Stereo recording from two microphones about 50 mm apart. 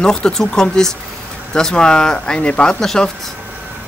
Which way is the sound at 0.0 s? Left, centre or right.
Centre.